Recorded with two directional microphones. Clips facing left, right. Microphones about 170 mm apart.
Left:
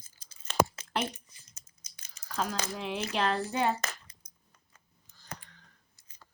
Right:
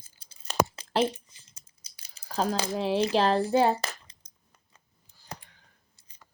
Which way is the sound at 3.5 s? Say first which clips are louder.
Right 7 dB; 35° right (ahead or behind).